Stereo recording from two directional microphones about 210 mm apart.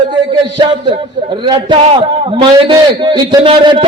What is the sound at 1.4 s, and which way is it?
A man's voice, 25° right (ahead or behind).